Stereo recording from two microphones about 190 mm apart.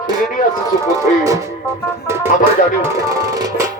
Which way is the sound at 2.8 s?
15° right (ahead or behind).